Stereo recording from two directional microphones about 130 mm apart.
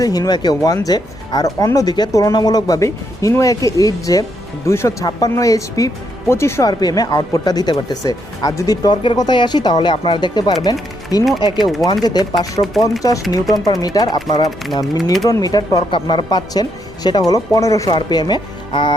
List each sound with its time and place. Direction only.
0.0 s speech: 30° left (ahead or behind)